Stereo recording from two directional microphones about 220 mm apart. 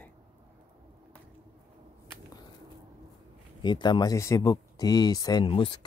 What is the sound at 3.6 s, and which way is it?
Speech, 20° left (ahead or behind).